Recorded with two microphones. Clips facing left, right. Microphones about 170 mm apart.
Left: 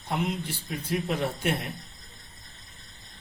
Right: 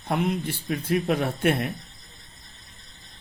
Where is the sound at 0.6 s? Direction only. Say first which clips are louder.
Right 6 dB; 55° right (ahead or behind).